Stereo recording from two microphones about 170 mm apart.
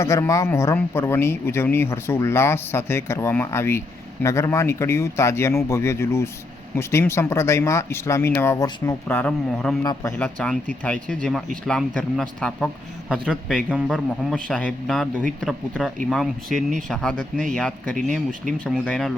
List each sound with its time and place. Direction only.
0.0 s speech: 15° left (ahead or behind)
9.8 s speech: 20° left (ahead or behind)
10.2 s a man's voice: 5° left (ahead or behind)